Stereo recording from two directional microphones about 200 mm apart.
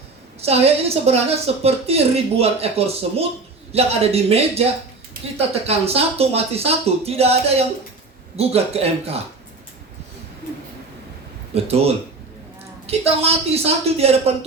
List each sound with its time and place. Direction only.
0.4 s a woman's voice: 30° right (ahead or behind)
11.5 s a woman's voice: 30° right (ahead or behind)